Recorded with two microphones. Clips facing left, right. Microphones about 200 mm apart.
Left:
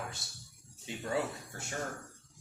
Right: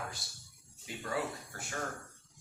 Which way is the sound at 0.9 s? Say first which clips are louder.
Left 2 dB; 25° left (ahead or behind).